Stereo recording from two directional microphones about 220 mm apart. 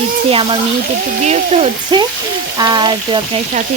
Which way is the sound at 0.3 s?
25° right (ahead or behind).